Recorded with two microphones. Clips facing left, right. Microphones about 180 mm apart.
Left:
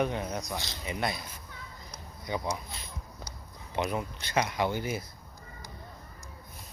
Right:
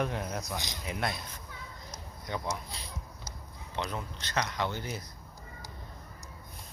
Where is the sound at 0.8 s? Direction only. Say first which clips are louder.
Left 2 dB; centre (ahead or behind).